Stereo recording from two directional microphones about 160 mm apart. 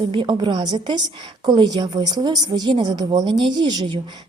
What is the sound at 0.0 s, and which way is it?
A woman's voice, 30° right (ahead or behind).